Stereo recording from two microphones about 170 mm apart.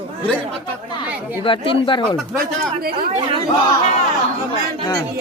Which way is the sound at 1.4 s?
30° left (ahead or behind).